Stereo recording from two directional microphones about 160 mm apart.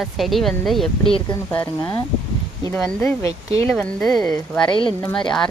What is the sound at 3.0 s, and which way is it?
Speech, 15° left (ahead or behind).